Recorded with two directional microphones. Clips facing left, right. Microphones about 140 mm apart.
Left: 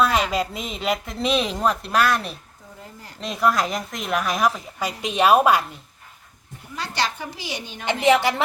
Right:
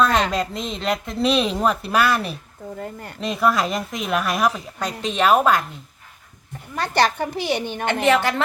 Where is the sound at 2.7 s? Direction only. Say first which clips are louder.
Right 9 dB; 60° right (ahead or behind).